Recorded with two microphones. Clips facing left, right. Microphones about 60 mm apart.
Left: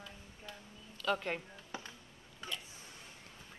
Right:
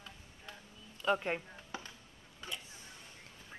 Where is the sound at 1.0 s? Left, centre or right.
Centre.